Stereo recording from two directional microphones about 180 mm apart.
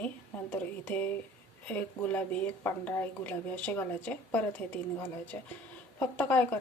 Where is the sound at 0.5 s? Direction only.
10° left (ahead or behind).